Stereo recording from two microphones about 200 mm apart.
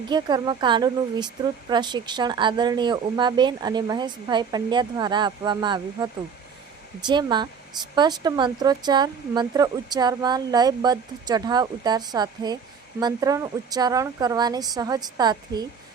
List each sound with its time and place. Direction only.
0.1 s speech: 20° right (ahead or behind)